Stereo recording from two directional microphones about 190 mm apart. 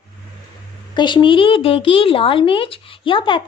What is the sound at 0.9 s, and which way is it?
A woman's voice, 25° left (ahead or behind).